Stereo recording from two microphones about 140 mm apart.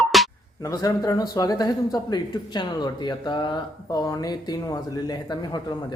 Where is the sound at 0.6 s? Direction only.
25° left (ahead or behind).